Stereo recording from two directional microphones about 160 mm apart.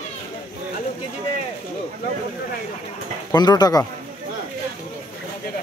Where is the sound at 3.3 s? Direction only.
25° left (ahead or behind).